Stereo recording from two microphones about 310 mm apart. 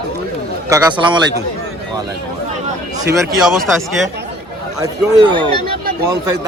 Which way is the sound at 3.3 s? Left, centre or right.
Centre.